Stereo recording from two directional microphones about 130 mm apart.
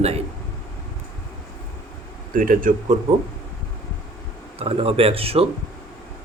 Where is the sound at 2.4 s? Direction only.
90° right.